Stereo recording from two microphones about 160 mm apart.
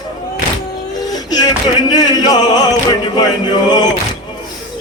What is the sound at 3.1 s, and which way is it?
Chant, 25° left (ahead or behind).